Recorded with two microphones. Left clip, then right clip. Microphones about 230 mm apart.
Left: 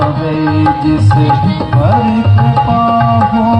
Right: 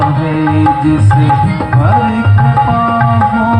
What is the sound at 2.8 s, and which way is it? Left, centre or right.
Music, left.